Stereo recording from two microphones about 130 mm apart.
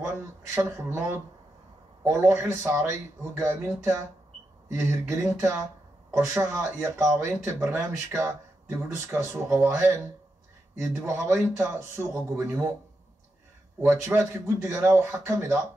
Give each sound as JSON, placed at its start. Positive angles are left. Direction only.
{"t": 0.6, "sound": "speech", "side_deg": -20}
{"t": 13.8, "sound": "speech", "side_deg": -20}